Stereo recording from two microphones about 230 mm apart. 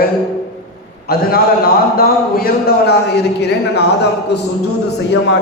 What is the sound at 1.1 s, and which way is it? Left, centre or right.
A man's voice, left.